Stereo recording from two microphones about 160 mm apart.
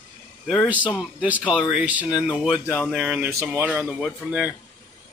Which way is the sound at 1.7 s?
10° right (ahead or behind).